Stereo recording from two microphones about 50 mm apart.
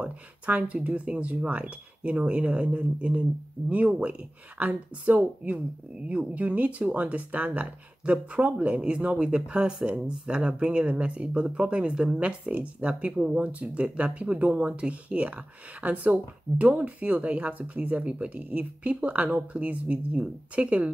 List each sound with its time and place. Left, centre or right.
0.0 s speech: right